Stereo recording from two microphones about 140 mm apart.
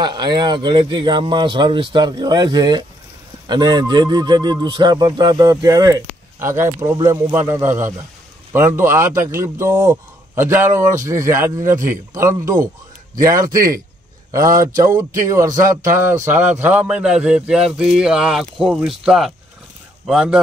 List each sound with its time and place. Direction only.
0.0 s a man's voice: 30° right (ahead or behind)
11.6 s speech: 65° right (ahead or behind)
11.9 s speech: 20° right (ahead or behind)
15.0 s a man's voice: 20° right (ahead or behind); by 20.3 s 5° right (ahead or behind)